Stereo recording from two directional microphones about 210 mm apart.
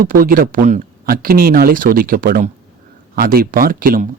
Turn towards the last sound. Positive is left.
turn(degrees=-40)  # may be behind; listen again after turning